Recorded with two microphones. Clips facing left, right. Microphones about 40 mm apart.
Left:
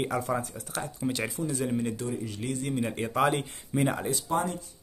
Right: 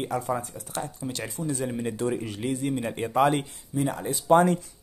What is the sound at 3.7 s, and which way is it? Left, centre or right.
Speech, left.